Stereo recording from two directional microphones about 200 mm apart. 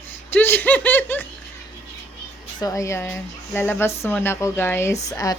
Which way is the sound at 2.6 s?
15° left (ahead or behind).